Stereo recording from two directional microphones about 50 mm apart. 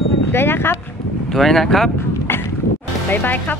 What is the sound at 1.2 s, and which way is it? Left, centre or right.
Speech, centre.